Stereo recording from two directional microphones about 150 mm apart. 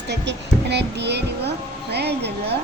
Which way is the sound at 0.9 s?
90° right.